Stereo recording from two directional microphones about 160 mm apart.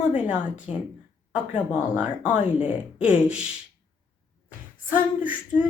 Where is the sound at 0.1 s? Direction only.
5° right (ahead or behind).